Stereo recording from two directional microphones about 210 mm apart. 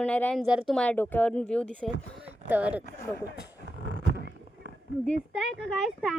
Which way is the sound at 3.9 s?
50° right (ahead or behind).